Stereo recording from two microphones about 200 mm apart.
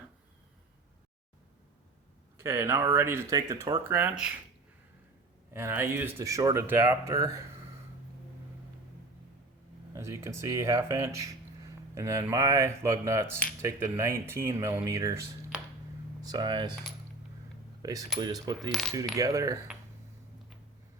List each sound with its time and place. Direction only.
2.4 s speech: 10° right (ahead or behind)
5.5 s speech: 10° right (ahead or behind)
9.9 s speech: 15° right (ahead or behind)
16.2 s speech: 20° right (ahead or behind)
17.8 s speech: 20° right (ahead or behind)